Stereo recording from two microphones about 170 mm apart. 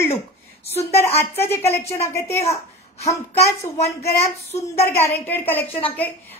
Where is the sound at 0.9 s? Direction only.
15° left (ahead or behind).